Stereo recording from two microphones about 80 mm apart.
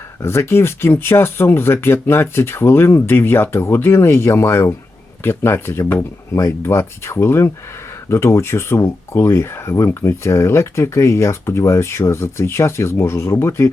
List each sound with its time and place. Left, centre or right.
0.2 s speech: left